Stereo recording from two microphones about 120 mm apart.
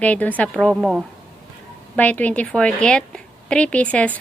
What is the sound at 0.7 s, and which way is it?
Speech, 10° right (ahead or behind).